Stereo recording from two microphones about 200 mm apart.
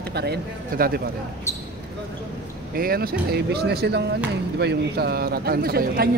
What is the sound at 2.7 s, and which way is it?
A man's voice, 50° right (ahead or behind).